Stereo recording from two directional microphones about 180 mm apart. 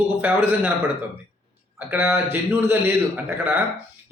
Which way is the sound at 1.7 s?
10° right (ahead or behind).